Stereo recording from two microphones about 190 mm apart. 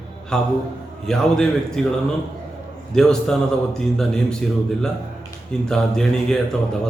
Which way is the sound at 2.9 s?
5° left (ahead or behind).